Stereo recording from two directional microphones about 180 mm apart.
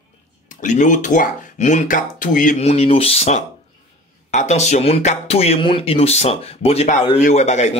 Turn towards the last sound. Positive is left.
turn(degrees=40)  # may be behind; listen again after turning